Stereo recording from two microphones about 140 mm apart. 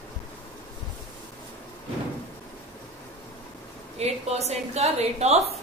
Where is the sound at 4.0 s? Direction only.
50° right (ahead or behind).